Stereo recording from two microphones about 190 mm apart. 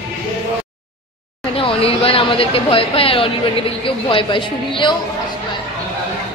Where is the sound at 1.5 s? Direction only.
30° left (ahead or behind).